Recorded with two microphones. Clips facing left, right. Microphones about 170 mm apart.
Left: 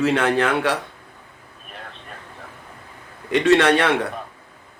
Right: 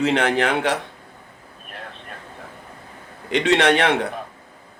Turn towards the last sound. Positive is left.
turn(degrees=-20)  # may be behind; listen again after turning